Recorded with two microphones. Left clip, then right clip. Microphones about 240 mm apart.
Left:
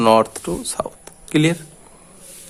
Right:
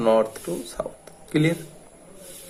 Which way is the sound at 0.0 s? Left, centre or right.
Left.